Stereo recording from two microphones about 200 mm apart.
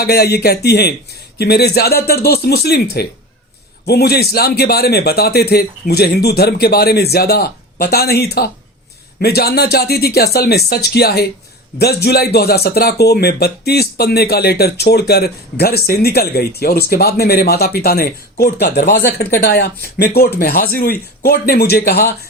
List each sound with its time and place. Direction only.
0.0 s speech: 50° left (ahead or behind)